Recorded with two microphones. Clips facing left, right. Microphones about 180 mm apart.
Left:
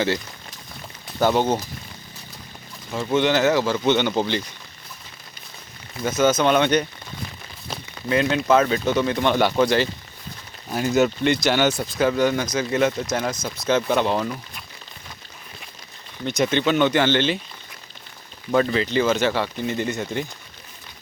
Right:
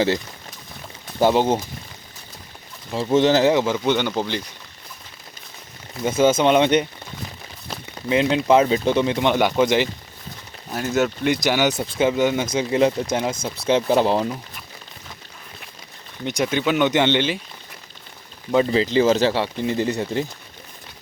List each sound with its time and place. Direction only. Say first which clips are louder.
1.2 s speech: right 2 dB; 25° right (ahead or behind)
2.9 s speech: right 3 dB; 30° right (ahead or behind)
3.8 s speech: left 1 dB; 5° right (ahead or behind)
6.0 s speech: right 2 dB; 25° right (ahead or behind)
8.1 s speech: right 2 dB; 25° right (ahead or behind)
10.7 s speech: left 2 dB; centre (ahead or behind)
11.3 s speech: even; 15° right (ahead or behind)
16.2 s speech: left 1 dB; 10° right (ahead or behind)
16.9 s speech: even; 20° right (ahead or behind)
18.9 s speech: right 3 dB; 35° right (ahead or behind)